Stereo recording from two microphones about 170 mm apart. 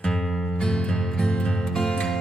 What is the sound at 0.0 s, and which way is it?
Music, 5° left (ahead or behind).